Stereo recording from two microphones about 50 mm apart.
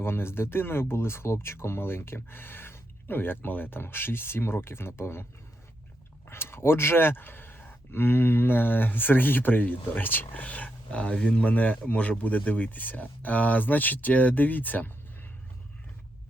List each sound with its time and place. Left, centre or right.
0.0 s speech: left
6.2 s speech: left